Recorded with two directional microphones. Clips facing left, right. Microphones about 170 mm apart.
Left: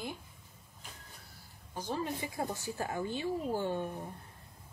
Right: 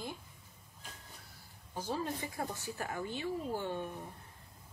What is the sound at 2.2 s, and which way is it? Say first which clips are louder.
A woman's voice: left 3 dB; 20° left (ahead or behind).